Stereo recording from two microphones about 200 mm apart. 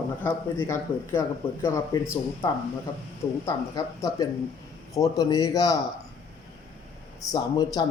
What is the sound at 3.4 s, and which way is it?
A man's voice, 20° left (ahead or behind).